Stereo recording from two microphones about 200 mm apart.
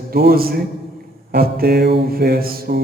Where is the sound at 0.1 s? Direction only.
50° right (ahead or behind).